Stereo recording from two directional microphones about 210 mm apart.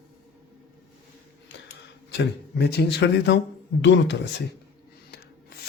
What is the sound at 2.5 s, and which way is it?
Speech, 50° left (ahead or behind).